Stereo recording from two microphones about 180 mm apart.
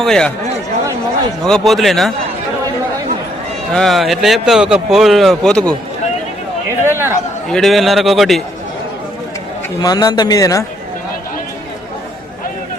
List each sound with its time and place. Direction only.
0.0 s speech: 5° left (ahead or behind)
1.5 s speech: centre (ahead or behind)
3.7 s speech: centre (ahead or behind)
6.8 s speech: 15° right (ahead or behind)
7.4 s speech: 5° left (ahead or behind)
9.8 s a man's voice: 20° left (ahead or behind)